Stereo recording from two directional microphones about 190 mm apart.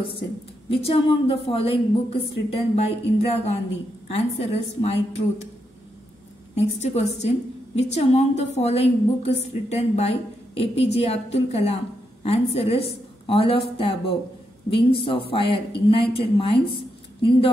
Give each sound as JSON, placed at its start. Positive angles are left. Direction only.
{"t": 0.7, "sound": "a woman's voice", "side_deg": 30}
{"t": 6.5, "sound": "a woman's voice", "side_deg": 35}